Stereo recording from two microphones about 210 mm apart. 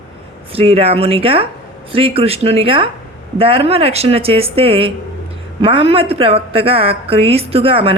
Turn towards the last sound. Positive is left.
turn(degrees=-25)  # may be behind; listen again after turning